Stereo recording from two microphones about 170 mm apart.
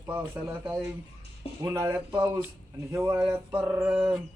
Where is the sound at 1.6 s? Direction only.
20° right (ahead or behind).